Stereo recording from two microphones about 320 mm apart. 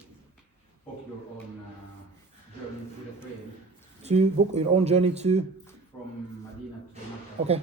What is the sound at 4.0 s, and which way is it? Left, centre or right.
Speech, right.